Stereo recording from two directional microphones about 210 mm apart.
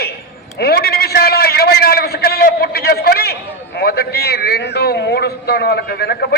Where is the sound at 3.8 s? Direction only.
45° left (ahead or behind).